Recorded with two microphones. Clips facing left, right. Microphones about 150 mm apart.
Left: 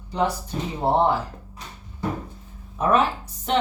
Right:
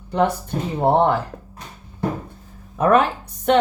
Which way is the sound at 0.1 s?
60° right (ahead or behind).